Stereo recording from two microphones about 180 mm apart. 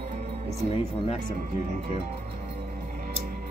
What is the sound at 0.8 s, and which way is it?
Speech, 35° left (ahead or behind).